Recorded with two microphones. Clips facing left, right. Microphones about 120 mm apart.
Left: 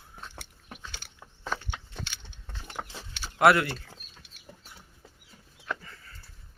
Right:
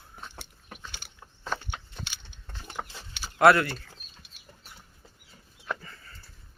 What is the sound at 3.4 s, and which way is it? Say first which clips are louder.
Speech: right 2 dB; 15° left (ahead or behind).